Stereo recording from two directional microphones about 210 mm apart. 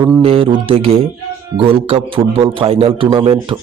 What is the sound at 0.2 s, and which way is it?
A man's voice, 25° right (ahead or behind).